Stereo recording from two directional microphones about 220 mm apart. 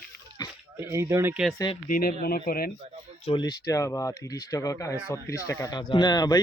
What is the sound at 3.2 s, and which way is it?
Speech, 20° left (ahead or behind).